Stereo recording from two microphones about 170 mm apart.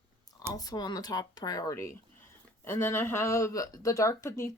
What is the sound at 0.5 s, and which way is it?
Speech, 20° left (ahead or behind).